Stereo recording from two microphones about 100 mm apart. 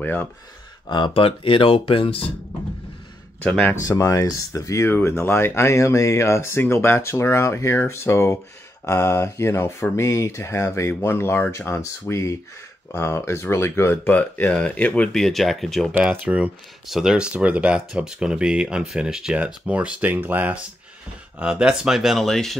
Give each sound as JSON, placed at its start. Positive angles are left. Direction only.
{"t": 0.0, "sound": "speech", "side_deg": 20}
{"t": 0.8, "sound": "speech", "side_deg": 50}
{"t": 3.4, "sound": "speech", "side_deg": 10}
{"t": 3.9, "sound": "speech", "side_deg": 35}
{"t": 16.0, "sound": "speech", "side_deg": -10}